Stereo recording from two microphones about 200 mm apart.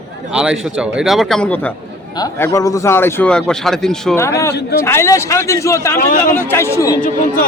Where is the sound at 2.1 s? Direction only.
15° left (ahead or behind).